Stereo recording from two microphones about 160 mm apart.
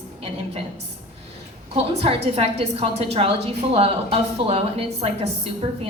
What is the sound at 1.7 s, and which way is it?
A woman's voice, 40° right (ahead or behind).